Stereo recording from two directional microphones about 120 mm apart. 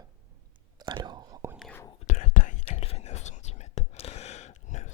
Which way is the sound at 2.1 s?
90° left.